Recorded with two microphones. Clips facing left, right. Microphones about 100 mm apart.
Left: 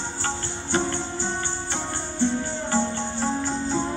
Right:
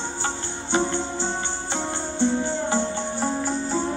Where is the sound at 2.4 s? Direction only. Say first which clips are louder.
Right 2 dB; 20° right (ahead or behind).